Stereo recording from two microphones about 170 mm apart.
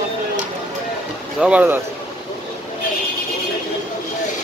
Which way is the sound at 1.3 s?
5° right (ahead or behind).